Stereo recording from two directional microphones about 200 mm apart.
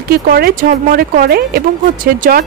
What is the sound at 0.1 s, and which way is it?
Speech, 50° right (ahead or behind).